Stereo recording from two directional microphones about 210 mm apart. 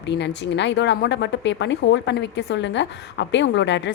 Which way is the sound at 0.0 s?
55° left (ahead or behind).